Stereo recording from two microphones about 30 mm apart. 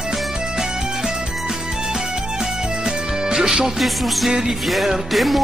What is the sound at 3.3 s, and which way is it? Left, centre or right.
Music, centre.